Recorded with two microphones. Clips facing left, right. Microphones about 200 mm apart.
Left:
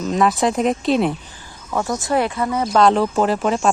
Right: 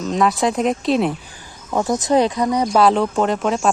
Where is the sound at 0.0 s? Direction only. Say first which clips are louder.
Even; centre (ahead or behind).